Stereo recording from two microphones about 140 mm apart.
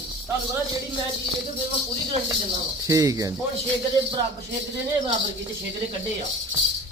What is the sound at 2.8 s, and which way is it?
Speech, 20° right (ahead or behind).